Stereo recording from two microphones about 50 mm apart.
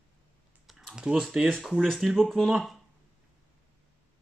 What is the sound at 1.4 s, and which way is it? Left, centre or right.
Speech, centre.